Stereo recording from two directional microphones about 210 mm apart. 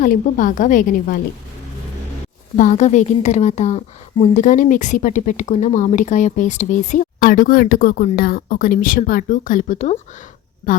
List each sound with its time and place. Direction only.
0.0 s a woman's voice: 40° left (ahead or behind)
2.6 s a woman's voice: 35° left (ahead or behind)